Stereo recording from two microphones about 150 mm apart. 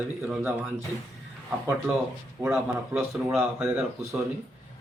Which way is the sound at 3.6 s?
15° right (ahead or behind).